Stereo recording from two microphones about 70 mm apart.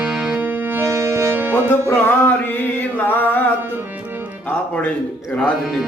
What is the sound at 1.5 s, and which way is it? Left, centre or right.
Music, left.